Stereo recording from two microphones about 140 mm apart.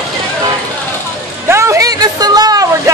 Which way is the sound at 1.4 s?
20° right (ahead or behind).